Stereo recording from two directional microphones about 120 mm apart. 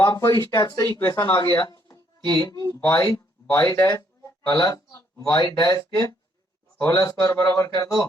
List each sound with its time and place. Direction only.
0.0 s speech: 30° left (ahead or behind)
3.4 s speech: 15° left (ahead or behind)
3.7 s speech: 30° left (ahead or behind)